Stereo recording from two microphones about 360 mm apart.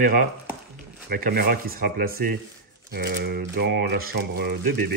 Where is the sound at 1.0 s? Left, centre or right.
Right.